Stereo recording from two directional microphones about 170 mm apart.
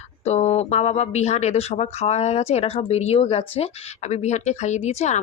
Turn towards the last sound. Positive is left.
turn(degrees=40)  # may be behind; listen again after turning